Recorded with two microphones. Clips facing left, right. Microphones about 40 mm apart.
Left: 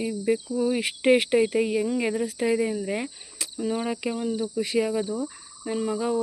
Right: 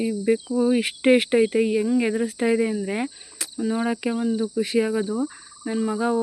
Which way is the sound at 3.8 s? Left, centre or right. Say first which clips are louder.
Right 4 dB; centre.